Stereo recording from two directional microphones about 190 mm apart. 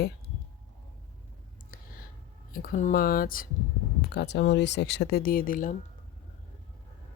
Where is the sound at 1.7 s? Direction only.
45° left (ahead or behind).